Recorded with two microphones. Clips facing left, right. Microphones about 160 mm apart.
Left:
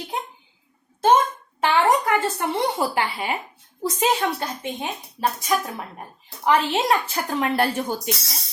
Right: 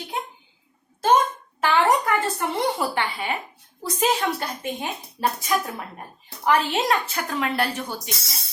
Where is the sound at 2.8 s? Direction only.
30° left (ahead or behind).